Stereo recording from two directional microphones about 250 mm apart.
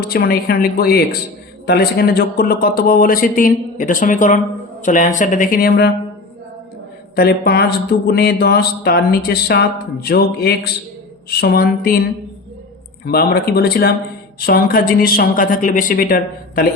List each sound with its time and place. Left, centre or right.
0.0 s speech: left
7.2 s speech: left
13.1 s speech: left